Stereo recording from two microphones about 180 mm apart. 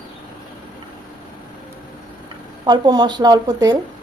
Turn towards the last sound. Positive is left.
turn(degrees=-20)  # may be behind; listen again after turning